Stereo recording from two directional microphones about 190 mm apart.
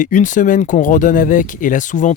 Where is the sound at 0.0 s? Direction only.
40° left (ahead or behind).